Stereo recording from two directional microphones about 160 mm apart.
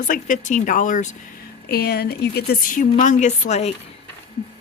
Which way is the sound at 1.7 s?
80° left.